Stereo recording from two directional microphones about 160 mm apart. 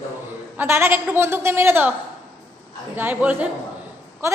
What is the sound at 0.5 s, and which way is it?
A woman's voice, 15° right (ahead or behind).